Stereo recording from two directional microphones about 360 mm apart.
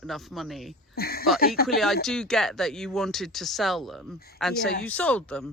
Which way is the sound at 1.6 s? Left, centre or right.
Centre.